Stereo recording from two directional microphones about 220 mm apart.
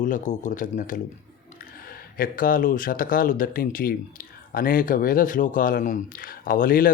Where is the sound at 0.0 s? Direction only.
35° left (ahead or behind).